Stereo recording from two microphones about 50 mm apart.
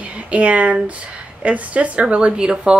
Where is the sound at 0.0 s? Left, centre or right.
Right.